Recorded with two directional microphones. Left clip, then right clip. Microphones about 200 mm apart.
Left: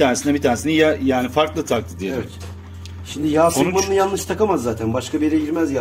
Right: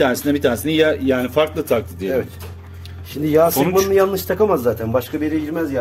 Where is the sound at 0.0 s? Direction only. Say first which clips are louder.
Even; 10° right (ahead or behind).